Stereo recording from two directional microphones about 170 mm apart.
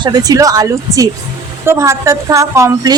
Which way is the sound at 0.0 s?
25° right (ahead or behind).